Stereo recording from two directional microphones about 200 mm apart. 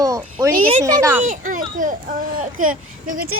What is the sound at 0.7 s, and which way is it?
Speech, 20° right (ahead or behind).